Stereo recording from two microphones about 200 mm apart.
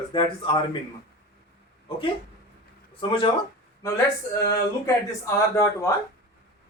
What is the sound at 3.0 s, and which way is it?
Speech, 25° left (ahead or behind).